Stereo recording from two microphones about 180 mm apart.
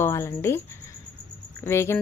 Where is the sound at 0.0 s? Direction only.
15° left (ahead or behind).